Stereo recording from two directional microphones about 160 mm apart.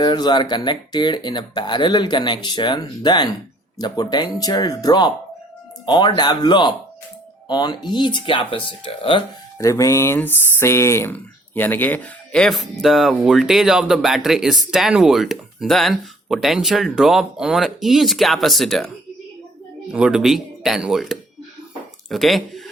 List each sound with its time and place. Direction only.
0.0 s speech: 25° left (ahead or behind)
9.6 s speech: 20° left (ahead or behind); by 18.9 s centre (ahead or behind)
19.9 s speech: 5° right (ahead or behind)